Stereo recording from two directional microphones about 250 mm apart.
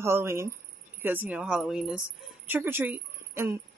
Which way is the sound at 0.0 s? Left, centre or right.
Centre.